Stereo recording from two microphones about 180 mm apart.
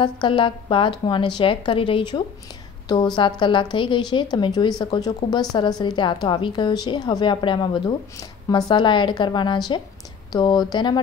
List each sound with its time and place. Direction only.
0.0 s a woman's voice: 30° left (ahead or behind)